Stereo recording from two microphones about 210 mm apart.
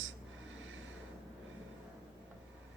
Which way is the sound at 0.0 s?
65° right (ahead or behind).